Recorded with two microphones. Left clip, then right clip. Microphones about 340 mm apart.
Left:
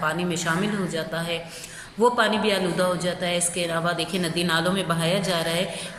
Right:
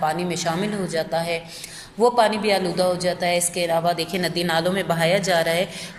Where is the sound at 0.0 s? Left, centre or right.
Centre.